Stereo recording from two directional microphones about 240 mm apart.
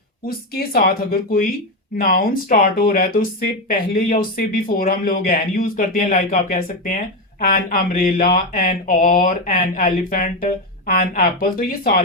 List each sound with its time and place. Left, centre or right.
0.3 s speech: left